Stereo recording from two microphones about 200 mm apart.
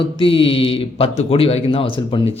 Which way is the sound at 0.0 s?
25° left (ahead or behind).